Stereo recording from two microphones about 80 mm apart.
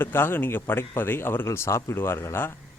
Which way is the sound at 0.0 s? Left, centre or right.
Left.